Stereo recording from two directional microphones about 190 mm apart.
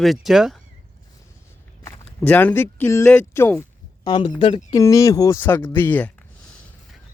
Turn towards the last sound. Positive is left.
turn(degrees=10)  # may be behind; listen again after turning